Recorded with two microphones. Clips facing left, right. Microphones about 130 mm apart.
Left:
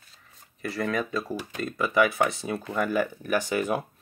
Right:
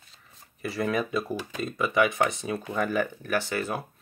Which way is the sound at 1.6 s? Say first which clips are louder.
Left 1 dB; centre (ahead or behind).